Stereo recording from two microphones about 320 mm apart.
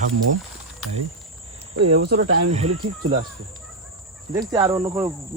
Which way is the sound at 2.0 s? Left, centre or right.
Right.